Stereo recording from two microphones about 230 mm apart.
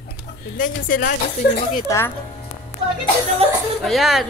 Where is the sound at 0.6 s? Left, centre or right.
Left.